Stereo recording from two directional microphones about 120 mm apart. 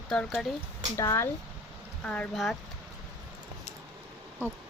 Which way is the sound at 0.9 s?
20° left (ahead or behind).